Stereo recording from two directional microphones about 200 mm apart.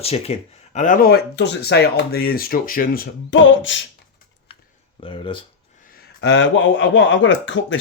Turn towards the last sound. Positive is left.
turn(degrees=65)  # may be behind; listen again after turning